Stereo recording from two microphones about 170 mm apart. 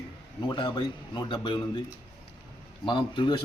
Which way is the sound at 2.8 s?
25° left (ahead or behind).